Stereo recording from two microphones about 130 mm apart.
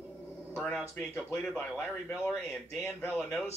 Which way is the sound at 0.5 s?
5° left (ahead or behind).